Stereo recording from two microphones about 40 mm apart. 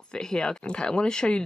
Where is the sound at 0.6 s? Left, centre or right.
Left.